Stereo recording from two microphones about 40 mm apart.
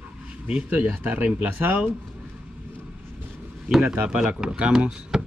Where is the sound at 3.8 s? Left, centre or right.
Right.